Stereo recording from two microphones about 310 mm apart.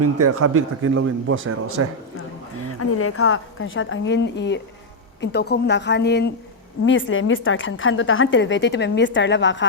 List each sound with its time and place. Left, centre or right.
0.0 s speech: right
2.1 s a sound: left
4.4 s a woman's voice: left